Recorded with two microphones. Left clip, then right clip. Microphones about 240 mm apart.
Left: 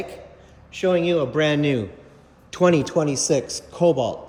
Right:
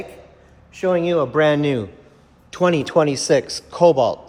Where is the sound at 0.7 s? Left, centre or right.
Centre.